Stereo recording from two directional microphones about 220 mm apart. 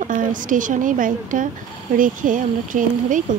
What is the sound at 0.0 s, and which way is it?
Speech, 35° right (ahead or behind).